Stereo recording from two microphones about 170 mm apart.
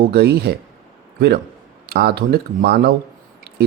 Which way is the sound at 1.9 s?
70° right (ahead or behind).